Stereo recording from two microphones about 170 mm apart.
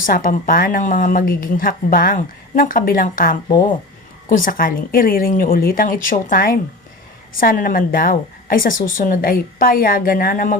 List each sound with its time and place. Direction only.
0.0 s speech: 55° left (ahead or behind)